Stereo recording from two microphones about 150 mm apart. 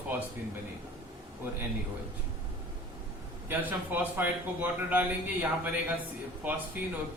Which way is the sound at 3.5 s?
10° right (ahead or behind).